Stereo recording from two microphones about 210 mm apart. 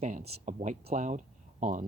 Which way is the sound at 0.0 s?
35° right (ahead or behind).